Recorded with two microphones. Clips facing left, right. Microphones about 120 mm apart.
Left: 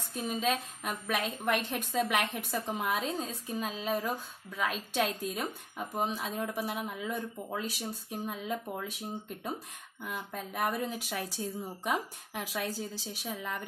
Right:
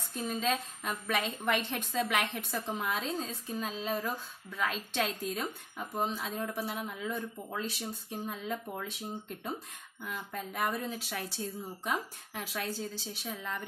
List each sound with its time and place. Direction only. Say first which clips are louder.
0.2 s speech: left 1 dB; 15° left (ahead or behind)
10.0 s speech: left 1 dB; 5° left (ahead or behind)